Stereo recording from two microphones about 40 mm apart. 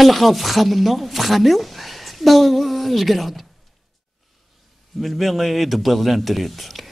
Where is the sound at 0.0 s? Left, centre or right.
Centre.